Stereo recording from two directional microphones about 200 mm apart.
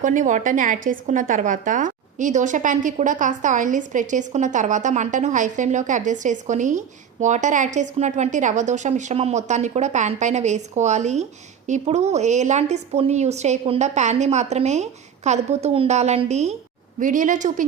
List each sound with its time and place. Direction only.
0.0 s a woman's voice: 40° right (ahead or behind)